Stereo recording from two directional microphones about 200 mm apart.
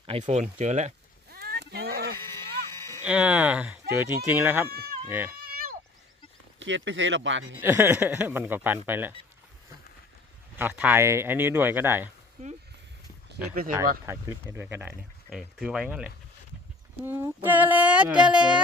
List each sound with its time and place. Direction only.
0.0 s speech: 25° right (ahead or behind)
1.3 s a sound: 50° right (ahead or behind)
2.2 s a sound: 15° left (ahead or behind)
3.0 s speech: 5° right (ahead or behind)
4.7 s speech: 50° right (ahead or behind)
5.0 s speech: 10° right (ahead or behind)
5.5 s a sound: 50° right (ahead or behind)
6.6 s speech: 65° right (ahead or behind)
7.6 s speech: 10° right (ahead or behind)
10.6 s speech: 5° right (ahead or behind)
13.2 s speech: 50° right (ahead or behind)
14.0 s speech: 15° right (ahead or behind)